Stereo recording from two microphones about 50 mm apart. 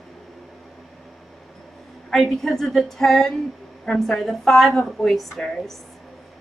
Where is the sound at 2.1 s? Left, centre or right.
Centre.